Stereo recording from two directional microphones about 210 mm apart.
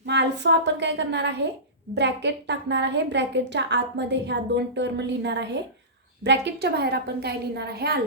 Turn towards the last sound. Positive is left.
turn(degrees=-50)  # may be behind; listen again after turning